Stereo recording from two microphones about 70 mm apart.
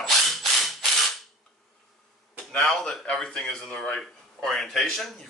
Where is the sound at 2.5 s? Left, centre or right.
Centre.